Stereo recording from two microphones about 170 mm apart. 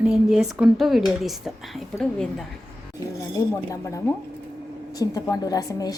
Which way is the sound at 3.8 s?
15° left (ahead or behind).